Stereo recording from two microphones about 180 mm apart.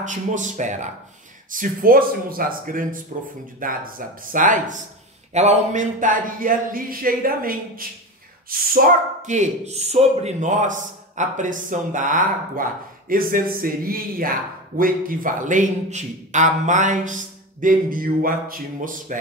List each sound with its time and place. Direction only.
0.0 s a man's voice: 45° right (ahead or behind)